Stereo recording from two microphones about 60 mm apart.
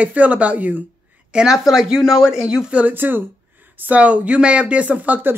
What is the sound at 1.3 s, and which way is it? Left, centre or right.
Speech, centre.